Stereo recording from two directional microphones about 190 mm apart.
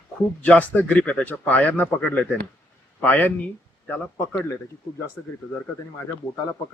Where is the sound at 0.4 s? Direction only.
10° left (ahead or behind).